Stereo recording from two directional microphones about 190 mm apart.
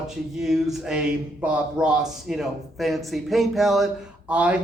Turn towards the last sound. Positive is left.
turn(degrees=-5)  # may be behind; listen again after turning